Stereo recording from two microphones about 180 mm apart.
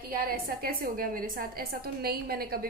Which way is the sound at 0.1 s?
55° right (ahead or behind).